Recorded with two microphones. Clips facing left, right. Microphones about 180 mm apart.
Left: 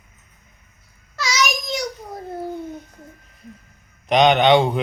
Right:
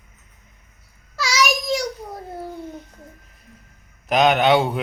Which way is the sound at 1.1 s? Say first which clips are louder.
Right 2 dB; 10° right (ahead or behind).